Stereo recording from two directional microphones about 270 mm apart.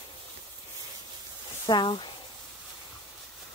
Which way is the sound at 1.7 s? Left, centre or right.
Centre.